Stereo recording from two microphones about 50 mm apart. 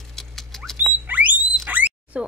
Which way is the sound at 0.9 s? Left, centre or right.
Right.